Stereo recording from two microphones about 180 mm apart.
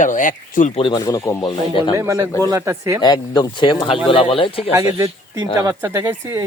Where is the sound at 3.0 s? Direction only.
20° left (ahead or behind).